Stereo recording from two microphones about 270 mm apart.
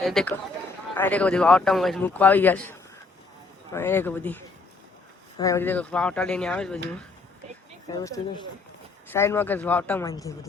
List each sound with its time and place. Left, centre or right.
0.0 s speech: centre
7.9 s speech: centre